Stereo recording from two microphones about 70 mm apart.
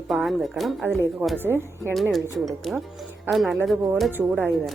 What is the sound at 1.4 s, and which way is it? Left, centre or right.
Speech, right.